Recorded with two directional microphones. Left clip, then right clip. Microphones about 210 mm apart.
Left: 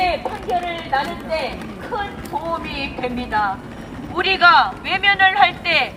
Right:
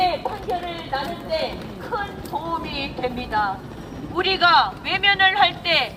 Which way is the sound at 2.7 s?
Centre (ahead or behind).